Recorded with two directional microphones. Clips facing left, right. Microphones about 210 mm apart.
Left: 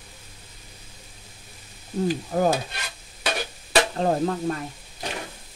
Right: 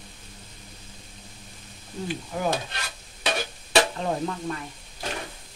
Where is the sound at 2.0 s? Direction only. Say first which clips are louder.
Left 6 dB; 40° left (ahead or behind).